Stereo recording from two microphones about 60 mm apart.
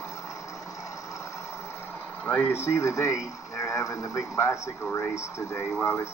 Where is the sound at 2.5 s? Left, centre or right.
Left.